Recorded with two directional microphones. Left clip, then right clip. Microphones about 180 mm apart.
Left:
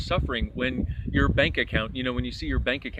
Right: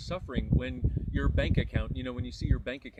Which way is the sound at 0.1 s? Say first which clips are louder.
Left 7 dB; 10° right (ahead or behind).